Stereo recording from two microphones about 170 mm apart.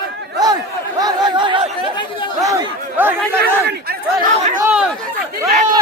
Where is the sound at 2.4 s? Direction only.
15° right (ahead or behind).